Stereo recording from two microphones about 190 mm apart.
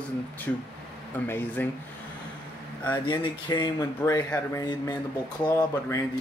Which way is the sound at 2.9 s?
25° left (ahead or behind).